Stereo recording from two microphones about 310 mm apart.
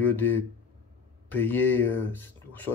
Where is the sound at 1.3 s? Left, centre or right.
Centre.